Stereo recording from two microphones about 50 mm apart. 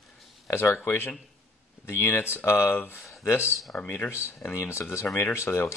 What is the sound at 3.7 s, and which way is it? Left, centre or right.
Speech, left.